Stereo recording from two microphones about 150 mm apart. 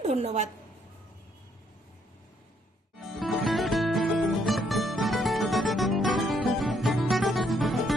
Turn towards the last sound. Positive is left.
turn(degrees=0)  # may be behind; listen again after turning